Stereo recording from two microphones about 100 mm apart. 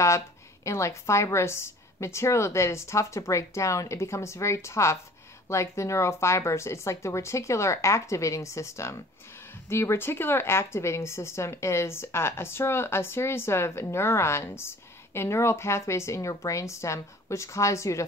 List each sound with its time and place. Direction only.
0.7 s a woman's voice: 30° left (ahead or behind)